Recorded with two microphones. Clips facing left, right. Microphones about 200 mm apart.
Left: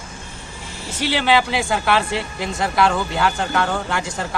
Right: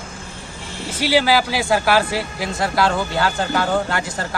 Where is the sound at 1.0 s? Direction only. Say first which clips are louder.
Right 2 dB; 5° right (ahead or behind).